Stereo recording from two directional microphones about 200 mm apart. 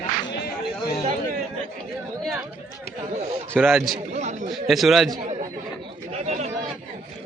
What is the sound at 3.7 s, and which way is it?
A man's voice, centre (ahead or behind).